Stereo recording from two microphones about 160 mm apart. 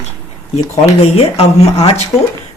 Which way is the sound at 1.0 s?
40° left (ahead or behind).